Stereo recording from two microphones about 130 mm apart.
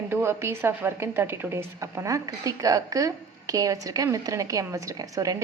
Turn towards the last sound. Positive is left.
turn(degrees=-25)  # may be behind; listen again after turning